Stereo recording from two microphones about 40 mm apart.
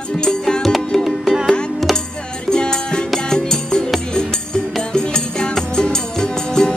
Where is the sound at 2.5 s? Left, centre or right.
Centre.